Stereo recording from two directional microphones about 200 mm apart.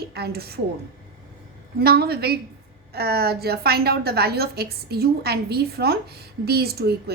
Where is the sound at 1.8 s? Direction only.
50° right (ahead or behind).